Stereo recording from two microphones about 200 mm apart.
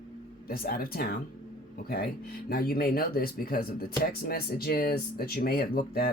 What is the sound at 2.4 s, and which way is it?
Speech, 50° left (ahead or behind).